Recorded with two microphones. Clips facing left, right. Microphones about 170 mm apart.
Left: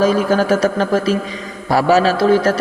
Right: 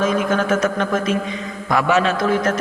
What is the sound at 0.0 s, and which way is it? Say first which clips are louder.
A man's voice: left 4 dB; 35° left (ahead or behind).